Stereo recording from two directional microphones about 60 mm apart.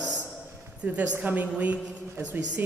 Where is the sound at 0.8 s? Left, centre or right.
Right.